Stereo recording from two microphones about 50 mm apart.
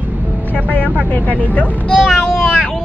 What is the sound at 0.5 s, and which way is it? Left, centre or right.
Speech, left.